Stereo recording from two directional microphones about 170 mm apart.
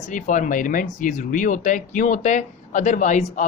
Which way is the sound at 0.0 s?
50° left (ahead or behind).